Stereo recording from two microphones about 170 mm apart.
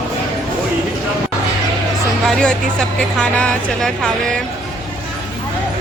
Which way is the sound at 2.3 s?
5° left (ahead or behind).